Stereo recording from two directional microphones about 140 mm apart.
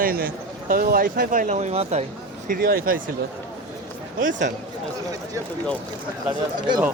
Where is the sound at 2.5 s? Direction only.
90° right.